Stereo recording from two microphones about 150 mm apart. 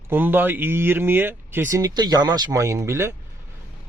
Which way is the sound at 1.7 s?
25° right (ahead or behind).